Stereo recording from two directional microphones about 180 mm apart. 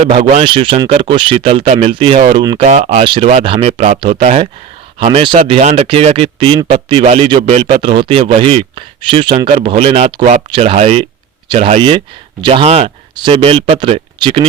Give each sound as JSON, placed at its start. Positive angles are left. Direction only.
{"t": 0.0, "sound": "speech", "side_deg": -35}
{"t": 2.6, "sound": "speech", "side_deg": -40}